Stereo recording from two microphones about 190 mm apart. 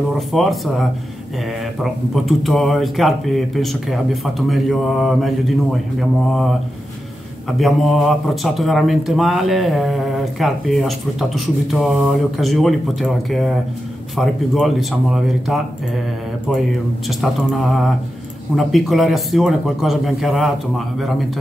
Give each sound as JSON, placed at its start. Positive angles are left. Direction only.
{"t": 0.3, "sound": "speech", "side_deg": 0}
{"t": 7.5, "sound": "speech", "side_deg": 0}
{"t": 17.2, "sound": "speech", "side_deg": 0}